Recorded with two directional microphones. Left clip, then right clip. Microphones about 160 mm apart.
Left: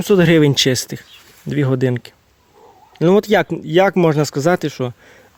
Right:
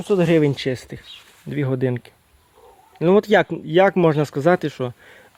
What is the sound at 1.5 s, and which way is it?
Speech, 25° left (ahead or behind).